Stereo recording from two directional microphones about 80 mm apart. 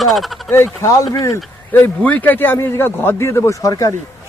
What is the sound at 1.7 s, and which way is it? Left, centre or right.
A woman's voice, left.